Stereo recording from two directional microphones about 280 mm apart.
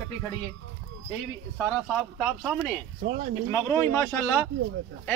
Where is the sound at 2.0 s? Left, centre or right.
Centre.